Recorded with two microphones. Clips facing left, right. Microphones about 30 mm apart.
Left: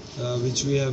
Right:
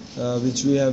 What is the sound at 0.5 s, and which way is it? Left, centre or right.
Speech, left.